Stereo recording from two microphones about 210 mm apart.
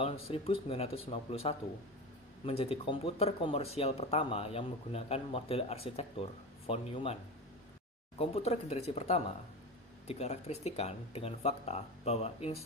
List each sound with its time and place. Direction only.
0.0 s speech: 25° left (ahead or behind)
8.2 s speech: 30° left (ahead or behind)